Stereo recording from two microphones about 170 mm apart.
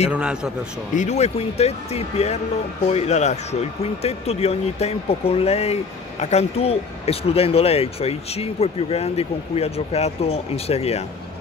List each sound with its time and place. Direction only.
0.1 s a man's voice: 5° right (ahead or behind)
0.9 s speech: 40° left (ahead or behind)